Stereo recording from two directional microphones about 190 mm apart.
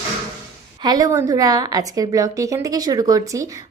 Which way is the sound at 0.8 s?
20° right (ahead or behind).